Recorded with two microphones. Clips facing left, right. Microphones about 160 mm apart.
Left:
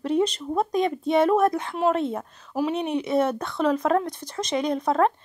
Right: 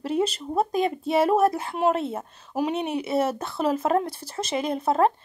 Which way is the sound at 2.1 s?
15° right (ahead or behind).